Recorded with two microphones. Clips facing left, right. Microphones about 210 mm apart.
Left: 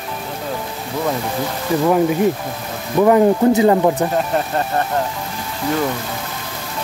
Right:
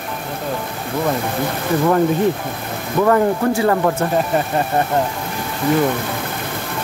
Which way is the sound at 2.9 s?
15° left (ahead or behind).